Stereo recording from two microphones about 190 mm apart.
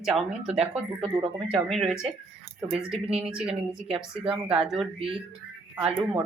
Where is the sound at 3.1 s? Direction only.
5° right (ahead or behind).